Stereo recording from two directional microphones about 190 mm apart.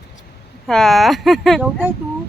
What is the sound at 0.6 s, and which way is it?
Speech, centre (ahead or behind).